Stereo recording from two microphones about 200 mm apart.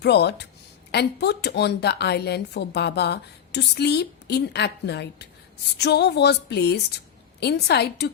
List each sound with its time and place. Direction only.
0.0 s a woman's voice: 55° left (ahead or behind)